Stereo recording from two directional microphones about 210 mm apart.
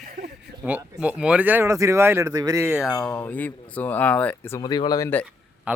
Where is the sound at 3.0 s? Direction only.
10° left (ahead or behind).